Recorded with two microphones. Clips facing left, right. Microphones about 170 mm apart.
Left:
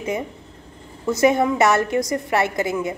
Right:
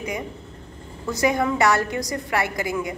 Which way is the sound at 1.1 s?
25° left (ahead or behind).